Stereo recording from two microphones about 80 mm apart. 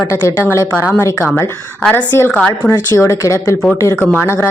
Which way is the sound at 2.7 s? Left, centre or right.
Left.